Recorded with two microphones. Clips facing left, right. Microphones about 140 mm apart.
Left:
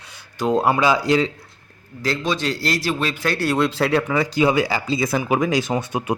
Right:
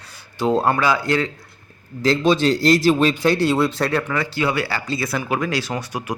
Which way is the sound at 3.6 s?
Centre (ahead or behind).